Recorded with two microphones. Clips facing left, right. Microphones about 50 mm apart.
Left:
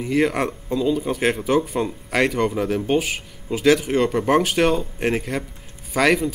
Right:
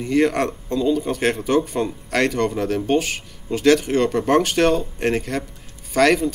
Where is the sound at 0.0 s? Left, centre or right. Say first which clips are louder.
Right 2 dB; centre.